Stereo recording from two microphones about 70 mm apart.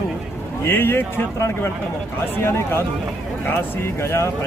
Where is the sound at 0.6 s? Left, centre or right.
Left.